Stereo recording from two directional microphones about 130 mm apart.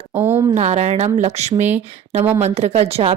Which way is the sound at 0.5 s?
60° right (ahead or behind).